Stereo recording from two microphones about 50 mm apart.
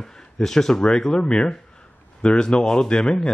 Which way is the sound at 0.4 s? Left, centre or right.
Centre.